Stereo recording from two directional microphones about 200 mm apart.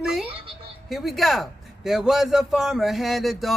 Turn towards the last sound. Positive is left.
turn(degrees=0)  # may be behind; listen again after turning